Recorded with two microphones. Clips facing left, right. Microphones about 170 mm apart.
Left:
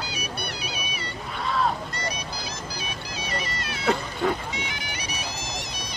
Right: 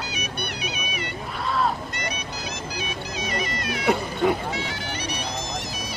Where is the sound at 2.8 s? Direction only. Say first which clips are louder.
Right 4 dB; 30° left (ahead or behind).